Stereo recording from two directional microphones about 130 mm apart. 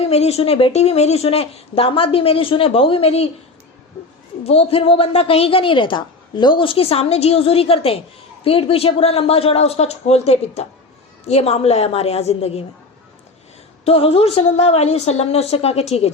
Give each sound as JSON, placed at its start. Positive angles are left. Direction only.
{"t": 0.0, "sound": "a woman's voice", "side_deg": 55}
{"t": 4.4, "sound": "a woman's voice", "side_deg": 50}
{"t": 13.8, "sound": "a woman's voice", "side_deg": 45}